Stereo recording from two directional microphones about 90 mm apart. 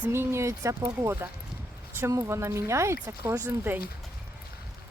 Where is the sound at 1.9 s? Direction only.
30° right (ahead or behind).